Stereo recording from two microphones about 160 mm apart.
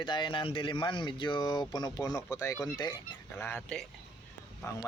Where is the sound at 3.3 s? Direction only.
10° left (ahead or behind).